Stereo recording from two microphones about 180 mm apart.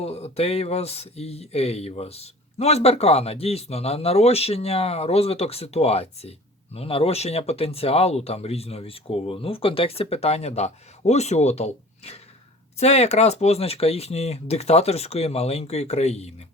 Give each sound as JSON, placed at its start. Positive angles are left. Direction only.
{"t": 0.0, "sound": "speech", "side_deg": 35}